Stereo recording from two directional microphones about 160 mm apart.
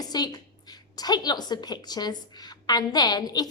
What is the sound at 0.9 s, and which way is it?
A woman's voice, 25° left (ahead or behind).